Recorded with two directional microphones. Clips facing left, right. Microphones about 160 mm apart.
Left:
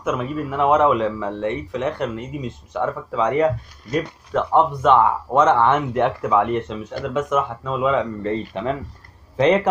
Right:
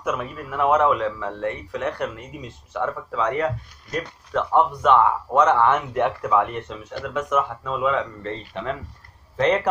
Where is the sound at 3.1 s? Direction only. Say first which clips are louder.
Left 5 dB; 15° left (ahead or behind).